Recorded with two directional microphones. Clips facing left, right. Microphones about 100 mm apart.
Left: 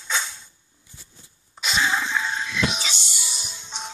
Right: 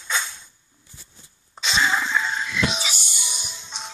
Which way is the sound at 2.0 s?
15° left (ahead or behind).